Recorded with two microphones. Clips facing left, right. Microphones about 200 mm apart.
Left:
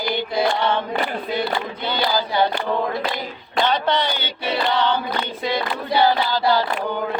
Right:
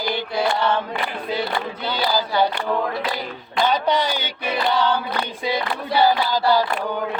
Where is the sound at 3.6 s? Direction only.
10° right (ahead or behind).